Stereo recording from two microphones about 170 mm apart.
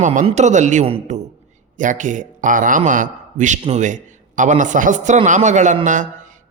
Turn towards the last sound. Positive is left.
turn(degrees=-45)  # may be behind; listen again after turning